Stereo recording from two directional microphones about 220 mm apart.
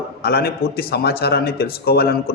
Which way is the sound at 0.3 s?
45° left (ahead or behind).